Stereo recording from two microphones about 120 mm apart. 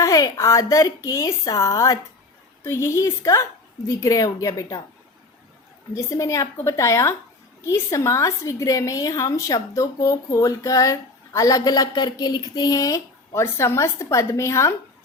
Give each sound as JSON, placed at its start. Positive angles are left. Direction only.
{"t": 0.0, "sound": "a woman's voice", "side_deg": 25}
{"t": 5.9, "sound": "a woman's voice", "side_deg": 25}